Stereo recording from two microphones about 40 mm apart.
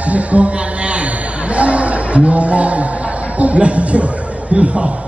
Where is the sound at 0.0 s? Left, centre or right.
Right.